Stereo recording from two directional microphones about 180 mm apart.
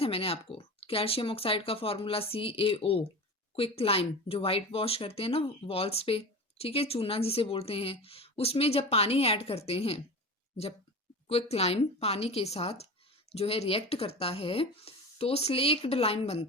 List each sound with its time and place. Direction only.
0.0 s speech: 30° left (ahead or behind)
11.3 s speech: 35° left (ahead or behind)